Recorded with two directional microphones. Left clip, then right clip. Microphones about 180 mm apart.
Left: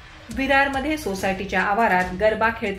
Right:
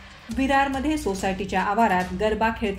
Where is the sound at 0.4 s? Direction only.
45° right (ahead or behind).